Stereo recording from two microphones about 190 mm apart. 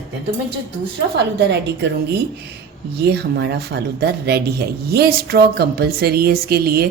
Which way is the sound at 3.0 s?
65° right (ahead or behind).